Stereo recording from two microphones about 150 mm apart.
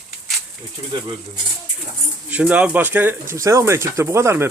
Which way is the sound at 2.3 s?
10° right (ahead or behind).